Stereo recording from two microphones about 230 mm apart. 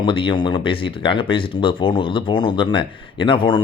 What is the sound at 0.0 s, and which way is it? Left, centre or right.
Speech, left.